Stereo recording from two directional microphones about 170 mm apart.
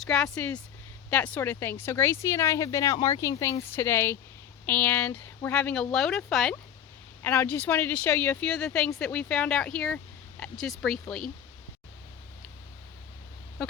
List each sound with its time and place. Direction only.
0.0 s speech: 5° left (ahead or behind)
7.2 s speech: 15° left (ahead or behind)